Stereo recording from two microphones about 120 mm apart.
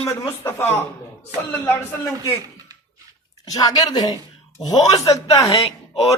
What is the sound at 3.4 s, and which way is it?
A man's voice, 30° left (ahead or behind).